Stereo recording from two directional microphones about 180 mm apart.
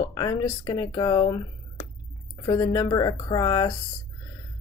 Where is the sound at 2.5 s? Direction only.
25° left (ahead or behind).